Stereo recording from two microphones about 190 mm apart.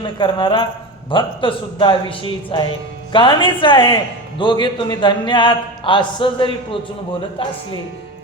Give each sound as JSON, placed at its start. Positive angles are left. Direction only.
{"t": 0.0, "sound": "a man's voice", "side_deg": 25}